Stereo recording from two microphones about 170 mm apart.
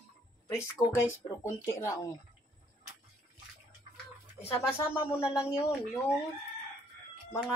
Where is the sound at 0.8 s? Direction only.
20° left (ahead or behind).